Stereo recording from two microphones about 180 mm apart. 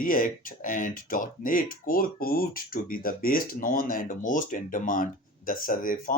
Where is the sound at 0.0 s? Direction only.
50° left (ahead or behind).